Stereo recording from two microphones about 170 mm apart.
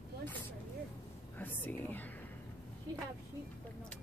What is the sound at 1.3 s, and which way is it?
Speech, 10° left (ahead or behind).